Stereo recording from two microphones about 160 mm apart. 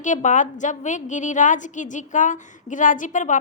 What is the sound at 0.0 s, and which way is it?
A woman's voice, 50° left (ahead or behind).